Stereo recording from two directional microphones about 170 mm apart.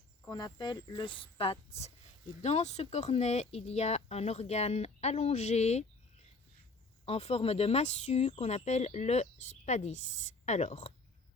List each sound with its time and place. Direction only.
0.3 s speech: 25° left (ahead or behind); by 5.8 s 40° left (ahead or behind)
7.0 s a woman's voice: 35° left (ahead or behind)